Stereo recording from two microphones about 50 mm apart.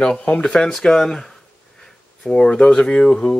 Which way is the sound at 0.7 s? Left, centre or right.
Centre.